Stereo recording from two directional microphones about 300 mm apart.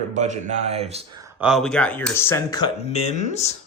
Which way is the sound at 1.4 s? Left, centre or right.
Centre.